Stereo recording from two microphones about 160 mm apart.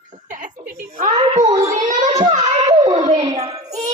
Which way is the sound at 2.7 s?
25° right (ahead or behind).